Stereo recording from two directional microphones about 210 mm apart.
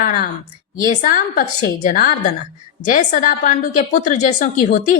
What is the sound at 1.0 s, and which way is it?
A woman's voice, 40° left (ahead or behind).